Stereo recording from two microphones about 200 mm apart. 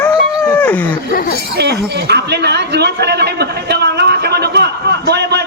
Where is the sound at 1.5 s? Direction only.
55° right (ahead or behind).